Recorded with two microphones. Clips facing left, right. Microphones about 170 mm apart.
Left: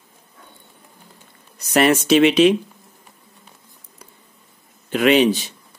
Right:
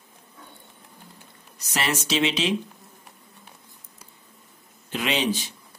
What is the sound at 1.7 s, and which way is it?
Speech, 60° left (ahead or behind).